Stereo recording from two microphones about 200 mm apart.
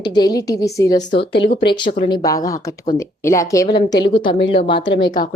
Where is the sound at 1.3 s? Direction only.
60° left (ahead or behind).